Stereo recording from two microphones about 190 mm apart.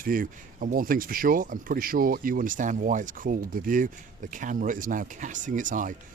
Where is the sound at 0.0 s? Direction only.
45° right (ahead or behind).